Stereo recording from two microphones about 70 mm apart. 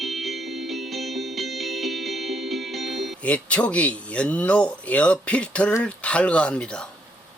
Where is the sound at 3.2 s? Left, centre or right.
Centre.